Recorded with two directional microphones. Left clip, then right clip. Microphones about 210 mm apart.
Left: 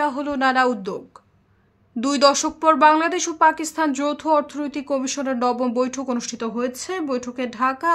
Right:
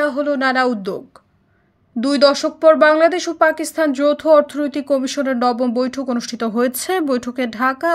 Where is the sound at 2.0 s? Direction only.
10° right (ahead or behind).